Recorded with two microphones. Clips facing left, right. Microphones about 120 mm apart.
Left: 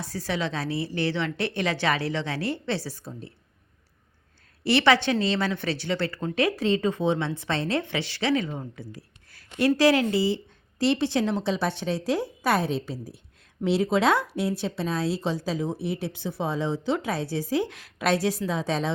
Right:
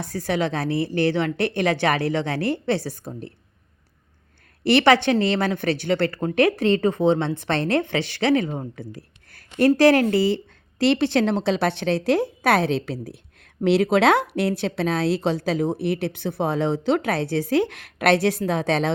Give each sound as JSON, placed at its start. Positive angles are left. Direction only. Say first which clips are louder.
{"t": 0.0, "sound": "a woman's voice", "louder": "right 5 dB", "side_deg": -50}
{"t": 4.6, "sound": "a woman's voice", "louder": "right 4 dB", "side_deg": -50}